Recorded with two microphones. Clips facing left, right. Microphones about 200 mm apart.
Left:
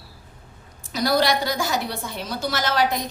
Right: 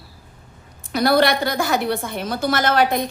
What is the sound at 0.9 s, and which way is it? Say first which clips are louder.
A woman's voice: right 4 dB; 60° right (ahead or behind).